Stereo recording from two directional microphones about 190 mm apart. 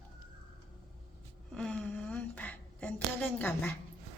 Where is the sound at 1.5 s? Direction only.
5° left (ahead or behind).